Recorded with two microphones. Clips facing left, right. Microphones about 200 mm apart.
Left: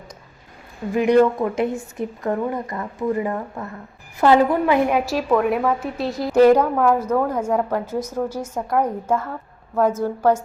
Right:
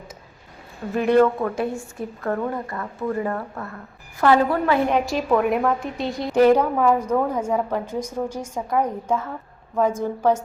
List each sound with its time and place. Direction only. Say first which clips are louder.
0.9 s a woman's voice: left 2 dB; 15° left (ahead or behind)
6.6 s a woman's voice: left 1 dB; 5° right (ahead or behind)
7.3 s a woman's voice: left 2 dB; 10° left (ahead or behind)